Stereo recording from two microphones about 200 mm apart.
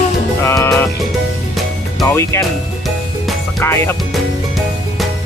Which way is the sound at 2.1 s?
15° left (ahead or behind).